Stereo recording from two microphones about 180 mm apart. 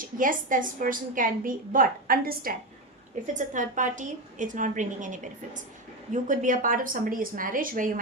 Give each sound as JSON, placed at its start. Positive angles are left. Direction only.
{"t": 0.0, "sound": "a woman's voice", "side_deg": -50}
{"t": 6.2, "sound": "a woman's voice", "side_deg": -45}